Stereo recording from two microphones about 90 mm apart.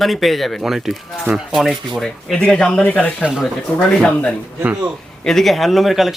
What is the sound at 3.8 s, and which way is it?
Speech, 10° left (ahead or behind).